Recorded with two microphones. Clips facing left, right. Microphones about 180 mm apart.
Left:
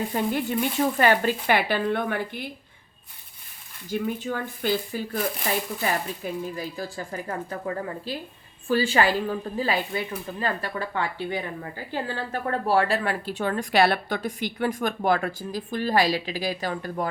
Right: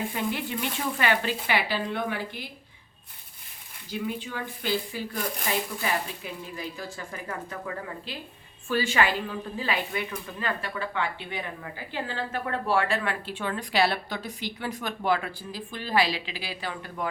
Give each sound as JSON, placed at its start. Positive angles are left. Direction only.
{"t": 0.1, "sound": "a woman's voice", "side_deg": 45}
{"t": 3.9, "sound": "a woman's voice", "side_deg": 50}
{"t": 6.2, "sound": "a woman's voice", "side_deg": 40}